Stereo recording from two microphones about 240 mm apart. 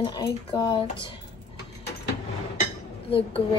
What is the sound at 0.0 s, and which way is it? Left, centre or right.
Speech, centre.